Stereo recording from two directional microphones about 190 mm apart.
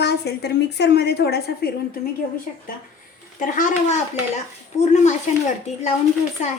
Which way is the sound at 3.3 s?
45° left (ahead or behind).